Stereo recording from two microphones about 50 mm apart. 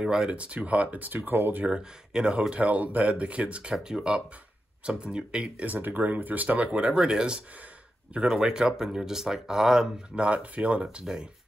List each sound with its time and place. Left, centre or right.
0.0 s speech: centre; by 1.6 s right
1.7 s speech: centre
2.5 s speech: right
5.7 s speech: right; by 9.8 s centre
10.1 s speech: right